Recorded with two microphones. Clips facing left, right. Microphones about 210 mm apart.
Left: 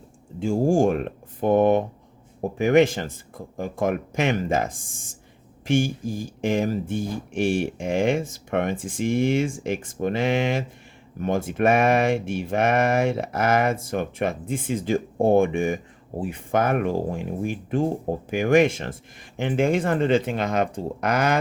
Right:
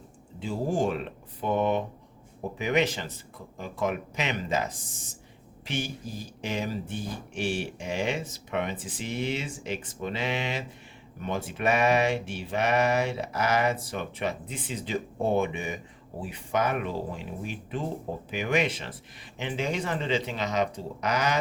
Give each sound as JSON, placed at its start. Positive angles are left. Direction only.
{"t": 0.3, "sound": "speech", "side_deg": 50}